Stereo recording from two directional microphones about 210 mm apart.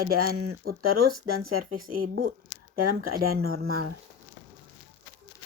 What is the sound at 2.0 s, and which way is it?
Speech, 45° right (ahead or behind).